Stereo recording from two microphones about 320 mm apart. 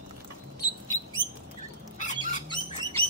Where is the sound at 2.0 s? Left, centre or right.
Left.